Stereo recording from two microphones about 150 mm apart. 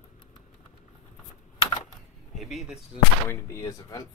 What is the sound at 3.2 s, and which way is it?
Speech, 20° left (ahead or behind).